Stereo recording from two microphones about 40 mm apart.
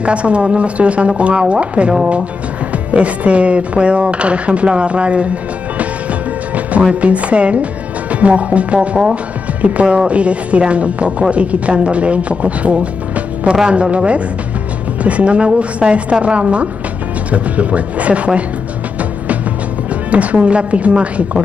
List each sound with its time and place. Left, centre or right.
0.0 s speech: right
6.9 s speech: right
13.1 s music: right
13.7 s speech: right
20.1 s music: right
20.4 s speech: right